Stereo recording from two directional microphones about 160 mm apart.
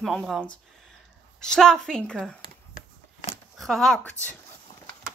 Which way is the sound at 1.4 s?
5° left (ahead or behind).